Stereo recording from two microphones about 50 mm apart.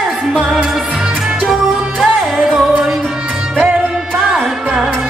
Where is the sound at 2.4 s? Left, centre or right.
Centre.